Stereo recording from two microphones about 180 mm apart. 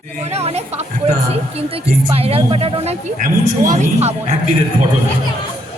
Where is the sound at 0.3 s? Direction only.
35° right (ahead or behind).